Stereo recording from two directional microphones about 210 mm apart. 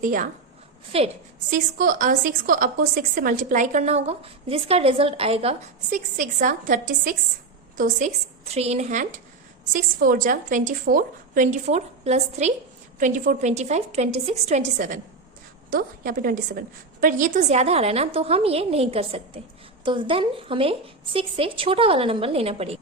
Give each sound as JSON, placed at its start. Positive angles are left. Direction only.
{"t": 0.0, "sound": "a woman's voice", "side_deg": -40}